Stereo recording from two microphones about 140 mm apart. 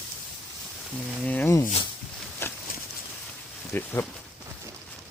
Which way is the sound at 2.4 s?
15° left (ahead or behind).